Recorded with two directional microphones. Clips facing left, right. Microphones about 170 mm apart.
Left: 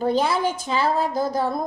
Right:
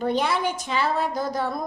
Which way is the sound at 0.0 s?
35° left (ahead or behind).